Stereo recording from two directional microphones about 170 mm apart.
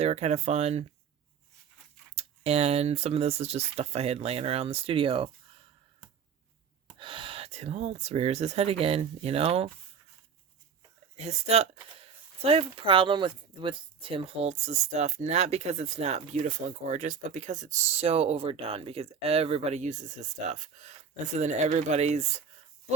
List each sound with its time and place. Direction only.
0.0 s speech: 40° right (ahead or behind)
2.1 s speech: 40° right (ahead or behind)
7.0 s speech: 30° right (ahead or behind)
11.2 s speech: 40° right (ahead or behind)
21.3 s speech: 45° right (ahead or behind)